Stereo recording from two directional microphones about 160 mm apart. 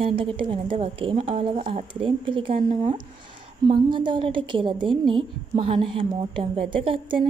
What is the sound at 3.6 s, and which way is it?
A woman's voice, 30° right (ahead or behind).